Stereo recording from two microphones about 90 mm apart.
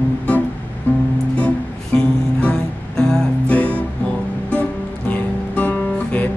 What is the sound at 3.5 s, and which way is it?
Music, 15° left (ahead or behind).